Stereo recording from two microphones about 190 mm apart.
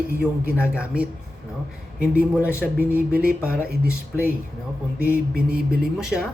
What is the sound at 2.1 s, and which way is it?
Speech, 5° right (ahead or behind).